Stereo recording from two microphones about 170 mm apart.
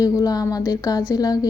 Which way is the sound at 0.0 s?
20° left (ahead or behind).